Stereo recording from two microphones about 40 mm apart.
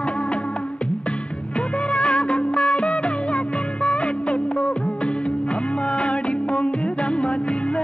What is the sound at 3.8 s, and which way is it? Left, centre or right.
Music, left.